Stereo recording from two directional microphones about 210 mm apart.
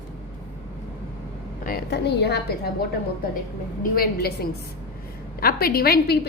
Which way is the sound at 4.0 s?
45° left (ahead or behind).